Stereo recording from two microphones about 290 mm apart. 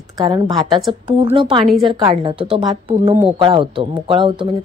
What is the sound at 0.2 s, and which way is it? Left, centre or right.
Speech, centre.